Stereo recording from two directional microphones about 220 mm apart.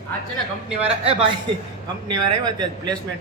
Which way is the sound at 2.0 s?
20° right (ahead or behind).